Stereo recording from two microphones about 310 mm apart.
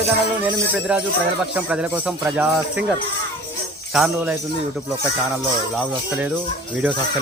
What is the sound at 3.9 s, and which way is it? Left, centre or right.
Speech, centre.